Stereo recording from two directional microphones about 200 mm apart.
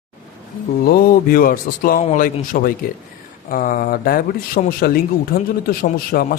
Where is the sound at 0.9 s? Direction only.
45° left (ahead or behind).